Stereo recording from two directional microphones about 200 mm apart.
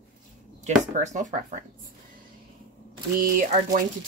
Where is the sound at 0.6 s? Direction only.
35° right (ahead or behind).